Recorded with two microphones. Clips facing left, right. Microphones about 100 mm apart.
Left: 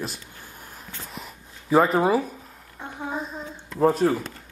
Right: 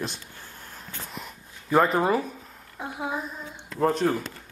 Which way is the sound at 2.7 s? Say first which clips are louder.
Right 2 dB; 10° right (ahead or behind).